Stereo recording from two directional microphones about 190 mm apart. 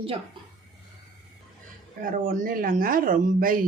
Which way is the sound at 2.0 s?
45° right (ahead or behind).